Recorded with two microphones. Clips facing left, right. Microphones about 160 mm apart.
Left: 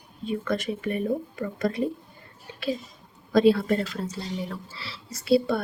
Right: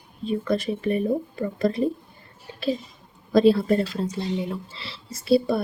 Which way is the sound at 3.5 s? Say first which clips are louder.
Right 3 dB; 25° right (ahead or behind).